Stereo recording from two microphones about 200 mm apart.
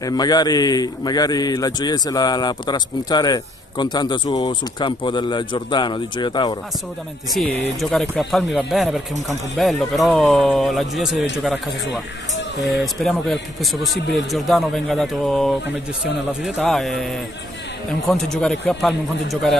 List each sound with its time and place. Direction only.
0.0 s a man's voice: 20° left (ahead or behind)
7.3 s speech: 5° left (ahead or behind)
12.8 s speech: centre (ahead or behind)